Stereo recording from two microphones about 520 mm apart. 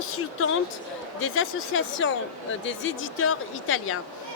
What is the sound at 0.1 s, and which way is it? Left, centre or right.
Speech, left.